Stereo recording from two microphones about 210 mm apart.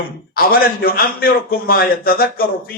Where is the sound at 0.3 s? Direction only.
45° left (ahead or behind).